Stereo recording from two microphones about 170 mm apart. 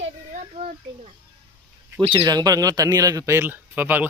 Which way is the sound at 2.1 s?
25° right (ahead or behind).